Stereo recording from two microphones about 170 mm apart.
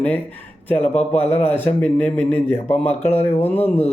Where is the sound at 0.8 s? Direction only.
40° left (ahead or behind).